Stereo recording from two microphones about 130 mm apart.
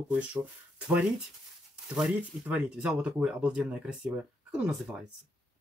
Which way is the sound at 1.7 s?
10° right (ahead or behind).